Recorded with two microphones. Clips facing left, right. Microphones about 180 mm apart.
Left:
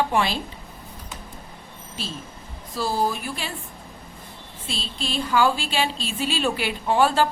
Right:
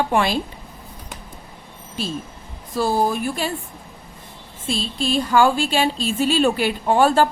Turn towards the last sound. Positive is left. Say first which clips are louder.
# right 4 dB
turn(degrees=-45)  # may be behind; listen again after turning